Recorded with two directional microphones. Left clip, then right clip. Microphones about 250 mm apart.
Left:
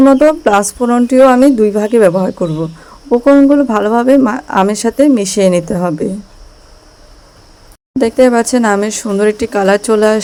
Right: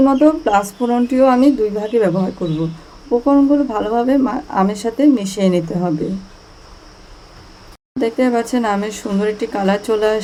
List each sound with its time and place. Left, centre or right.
0.1 s speech: left
7.9 s speech: left